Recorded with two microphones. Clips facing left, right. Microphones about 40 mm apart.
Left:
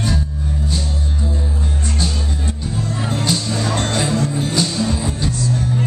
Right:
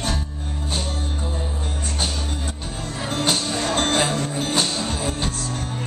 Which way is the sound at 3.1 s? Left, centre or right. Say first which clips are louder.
Even; right.